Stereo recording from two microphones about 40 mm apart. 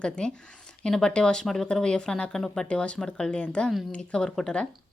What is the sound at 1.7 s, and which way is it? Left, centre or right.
Speech, centre.